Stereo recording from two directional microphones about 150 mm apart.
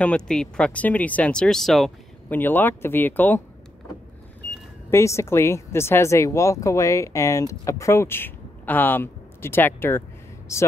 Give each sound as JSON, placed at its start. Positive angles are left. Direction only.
{"t": 0.0, "sound": "speech", "side_deg": 5}
{"t": 2.2, "sound": "speech", "side_deg": 10}
{"t": 4.9, "sound": "speech", "side_deg": 20}